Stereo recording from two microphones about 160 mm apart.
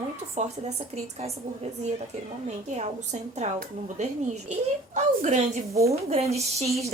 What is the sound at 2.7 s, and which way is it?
Speech, 45° right (ahead or behind).